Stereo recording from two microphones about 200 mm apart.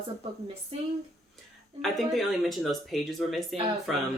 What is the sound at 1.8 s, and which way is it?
Speech, centre (ahead or behind).